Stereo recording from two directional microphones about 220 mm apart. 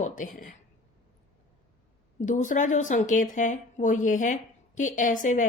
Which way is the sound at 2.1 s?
35° left (ahead or behind).